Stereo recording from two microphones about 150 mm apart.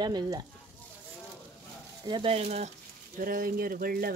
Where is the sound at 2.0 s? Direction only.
30° right (ahead or behind).